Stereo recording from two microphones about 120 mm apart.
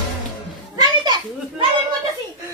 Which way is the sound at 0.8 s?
40° right (ahead or behind).